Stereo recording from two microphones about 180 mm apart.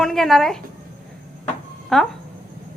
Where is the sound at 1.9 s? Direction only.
Centre (ahead or behind).